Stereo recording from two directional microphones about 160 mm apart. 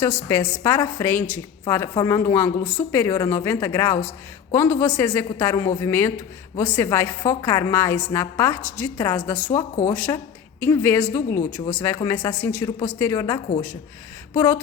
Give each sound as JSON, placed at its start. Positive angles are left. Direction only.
{"t": 0.3, "sound": "a woman's voice", "side_deg": 15}